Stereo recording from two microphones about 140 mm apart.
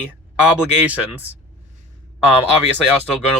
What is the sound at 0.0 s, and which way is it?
Speech, 10° right (ahead or behind).